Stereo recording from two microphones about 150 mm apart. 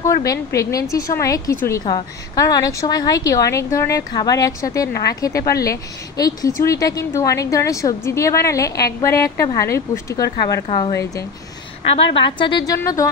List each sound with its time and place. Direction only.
0.0 s speech: 20° left (ahead or behind)
12.0 s a woman's voice: 35° left (ahead or behind)